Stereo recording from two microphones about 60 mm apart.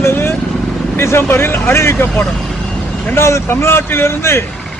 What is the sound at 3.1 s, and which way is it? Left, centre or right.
A man's voice, left.